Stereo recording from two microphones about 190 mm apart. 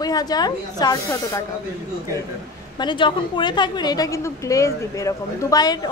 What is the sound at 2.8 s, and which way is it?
A woman's voice, 25° left (ahead or behind).